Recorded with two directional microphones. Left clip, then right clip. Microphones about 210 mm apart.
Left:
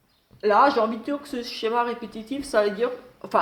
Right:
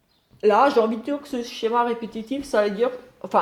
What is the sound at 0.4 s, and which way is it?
Speech, 55° right (ahead or behind).